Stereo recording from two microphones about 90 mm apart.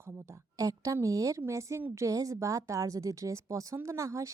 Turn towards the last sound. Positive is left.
turn(degrees=-35)  # may be behind; listen again after turning